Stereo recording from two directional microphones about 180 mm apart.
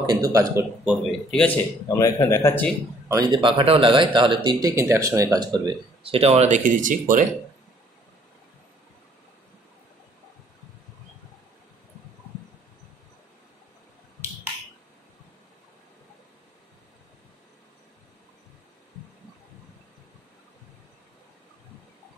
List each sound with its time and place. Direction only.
0.0 s speech: 20° right (ahead or behind)
1.3 s a man's voice: 10° left (ahead or behind)
3.1 s speech: 20° right (ahead or behind); by 7.2 s 45° right (ahead or behind)